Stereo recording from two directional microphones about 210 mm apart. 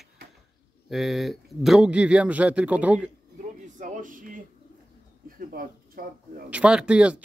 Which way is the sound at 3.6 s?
35° right (ahead or behind).